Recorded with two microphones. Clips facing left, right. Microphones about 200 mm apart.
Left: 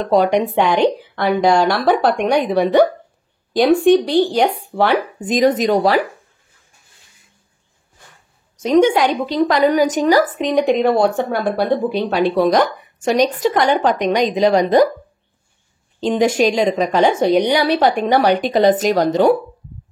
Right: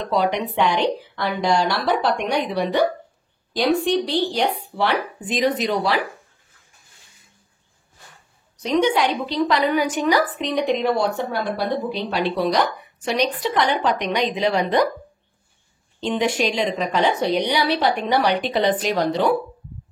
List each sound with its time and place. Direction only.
0.1 s a woman's voice: 45° left (ahead or behind)
8.6 s a woman's voice: 45° left (ahead or behind)
16.0 s a woman's voice: 40° left (ahead or behind)